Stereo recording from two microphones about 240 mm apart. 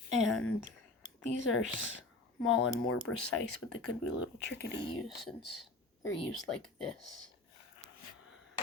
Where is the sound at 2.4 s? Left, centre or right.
Left.